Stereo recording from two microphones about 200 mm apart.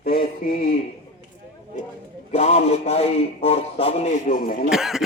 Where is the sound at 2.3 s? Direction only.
30° left (ahead or behind); by 4.7 s 45° left (ahead or behind).